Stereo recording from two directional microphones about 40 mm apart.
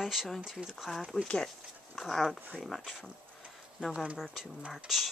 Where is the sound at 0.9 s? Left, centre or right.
Centre.